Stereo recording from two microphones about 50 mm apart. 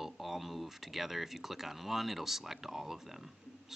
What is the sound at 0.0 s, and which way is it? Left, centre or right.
Speech, centre.